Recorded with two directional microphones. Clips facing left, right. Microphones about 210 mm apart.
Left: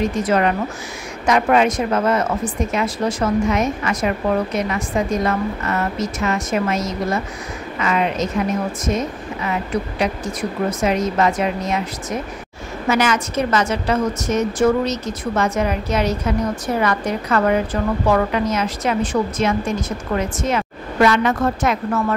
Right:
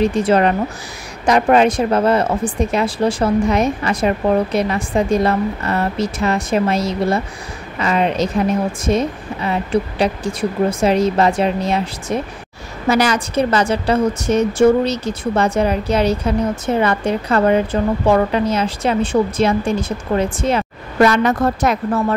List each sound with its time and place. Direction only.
0.0 s a woman's voice: 30° right (ahead or behind)